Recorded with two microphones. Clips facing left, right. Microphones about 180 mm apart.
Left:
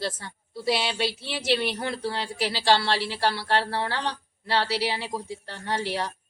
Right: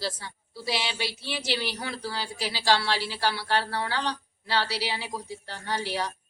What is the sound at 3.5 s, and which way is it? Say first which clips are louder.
Speech: left 2 dB; 25° left (ahead or behind).